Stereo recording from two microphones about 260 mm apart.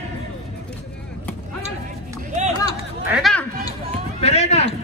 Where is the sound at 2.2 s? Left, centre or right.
Right.